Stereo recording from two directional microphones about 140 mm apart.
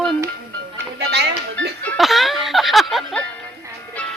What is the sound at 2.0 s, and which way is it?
Music, centre (ahead or behind).